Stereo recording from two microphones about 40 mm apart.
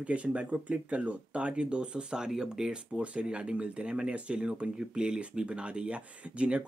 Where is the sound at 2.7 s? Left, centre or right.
Right.